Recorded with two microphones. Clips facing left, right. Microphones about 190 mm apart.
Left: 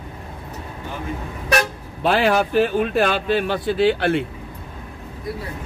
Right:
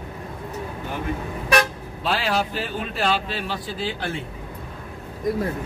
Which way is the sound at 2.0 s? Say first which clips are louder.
Left 6 dB; 55° left (ahead or behind).